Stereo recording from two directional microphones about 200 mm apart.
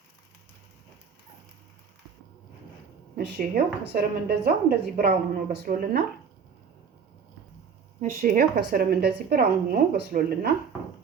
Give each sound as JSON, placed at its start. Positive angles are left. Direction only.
{"t": 3.2, "sound": "a woman's voice", "side_deg": -50}
{"t": 8.0, "sound": "a woman's voice", "side_deg": -45}